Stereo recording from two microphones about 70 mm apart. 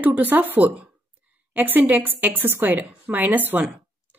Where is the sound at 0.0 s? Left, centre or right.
Right.